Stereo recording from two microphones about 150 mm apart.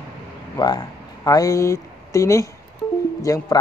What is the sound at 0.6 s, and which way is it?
Speech, 25° left (ahead or behind).